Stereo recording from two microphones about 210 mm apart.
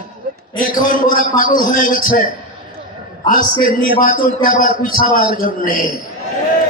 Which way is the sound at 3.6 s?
40° left (ahead or behind).